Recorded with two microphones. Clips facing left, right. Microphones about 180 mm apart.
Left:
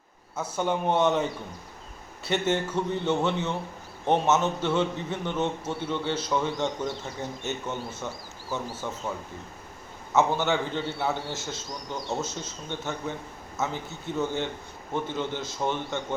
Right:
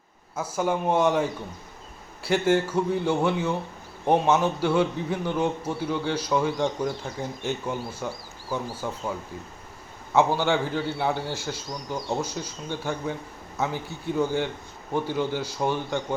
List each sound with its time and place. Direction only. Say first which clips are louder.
0.3 s a man's voice: right 2 dB; 5° right (ahead or behind)
10.2 s a man's voice: right 2 dB; 10° right (ahead or behind)